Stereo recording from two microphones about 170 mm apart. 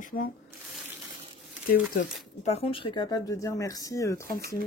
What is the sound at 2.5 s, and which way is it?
Speech, 35° left (ahead or behind).